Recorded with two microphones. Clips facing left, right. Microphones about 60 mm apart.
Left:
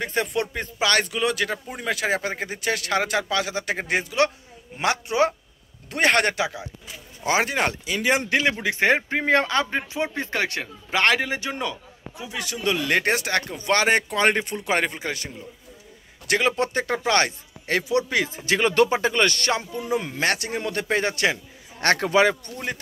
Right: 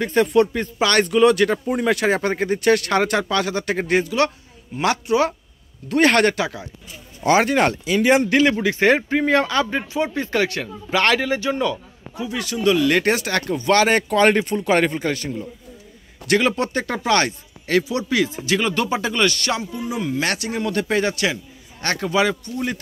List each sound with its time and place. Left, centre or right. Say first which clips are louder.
0.0 s speech: right 8 dB; centre
8.3 s speech: right 5 dB; centre
16.3 s speech: right 3 dB; centre
18.5 s speech: left 4 dB; left
18.9 s speech: right 1 dB; left
21.8 s speech: left 1 dB; left